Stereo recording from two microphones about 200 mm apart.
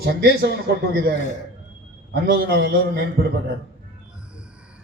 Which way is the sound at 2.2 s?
50° right (ahead or behind).